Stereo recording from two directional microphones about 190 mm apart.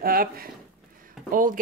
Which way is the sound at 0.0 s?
50° right (ahead or behind).